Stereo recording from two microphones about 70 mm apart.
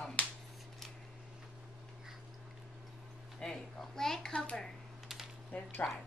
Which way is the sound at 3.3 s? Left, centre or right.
Centre.